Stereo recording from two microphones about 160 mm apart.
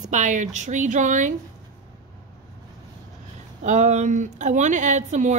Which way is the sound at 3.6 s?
50° right (ahead or behind).